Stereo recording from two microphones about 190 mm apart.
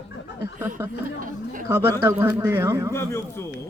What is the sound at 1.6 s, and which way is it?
A man's voice, 15° right (ahead or behind).